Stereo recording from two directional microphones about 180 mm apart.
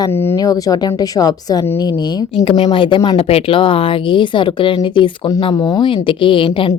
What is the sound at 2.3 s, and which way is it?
A woman's voice, 30° left (ahead or behind).